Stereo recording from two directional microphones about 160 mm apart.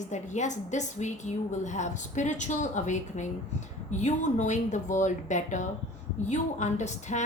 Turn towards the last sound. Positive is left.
turn(degrees=45)  # may be behind; listen again after turning